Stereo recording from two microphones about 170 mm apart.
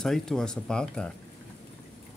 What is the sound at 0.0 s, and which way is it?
Speech, 5° left (ahead or behind).